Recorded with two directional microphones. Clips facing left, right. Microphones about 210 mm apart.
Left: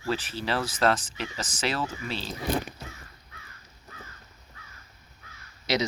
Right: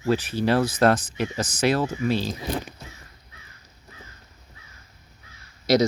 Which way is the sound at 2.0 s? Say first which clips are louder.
Right 11 dB; 45° right (ahead or behind).